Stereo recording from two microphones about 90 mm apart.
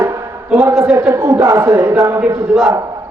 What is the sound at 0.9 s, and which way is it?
A man's voice, 35° right (ahead or behind).